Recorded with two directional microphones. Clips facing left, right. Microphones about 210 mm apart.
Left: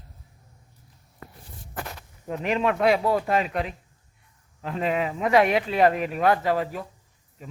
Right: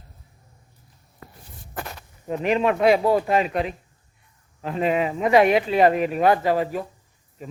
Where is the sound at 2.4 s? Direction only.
Centre (ahead or behind).